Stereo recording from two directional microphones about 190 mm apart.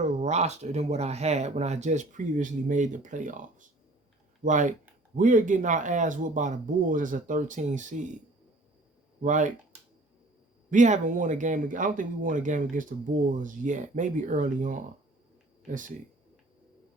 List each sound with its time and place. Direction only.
0.2 s speech: 35° right (ahead or behind)
9.2 s speech: 40° right (ahead or behind)
10.7 s speech: 40° right (ahead or behind)